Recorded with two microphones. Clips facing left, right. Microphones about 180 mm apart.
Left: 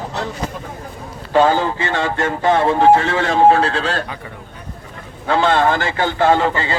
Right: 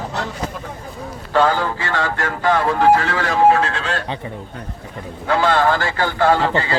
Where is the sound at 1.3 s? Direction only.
20° left (ahead or behind).